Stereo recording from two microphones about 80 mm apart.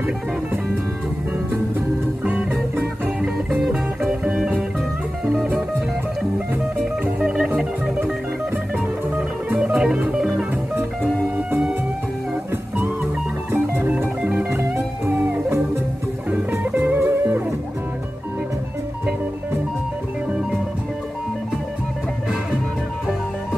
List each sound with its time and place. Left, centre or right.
2.2 s music: right; by 5.5 s centre
7.2 s music: centre
12.7 s music: right